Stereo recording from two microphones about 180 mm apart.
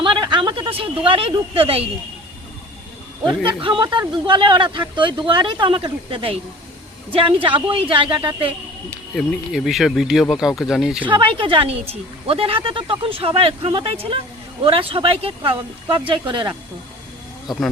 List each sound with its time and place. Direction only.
0.0 s speech: 25° right (ahead or behind)
3.6 s a woman's voice: 25° right (ahead or behind)
8.9 s speech: 5° left (ahead or behind)
11.1 s a woman's voice: 30° right (ahead or behind)